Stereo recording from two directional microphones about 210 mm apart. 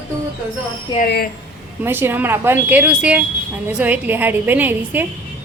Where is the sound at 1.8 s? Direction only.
10° right (ahead or behind).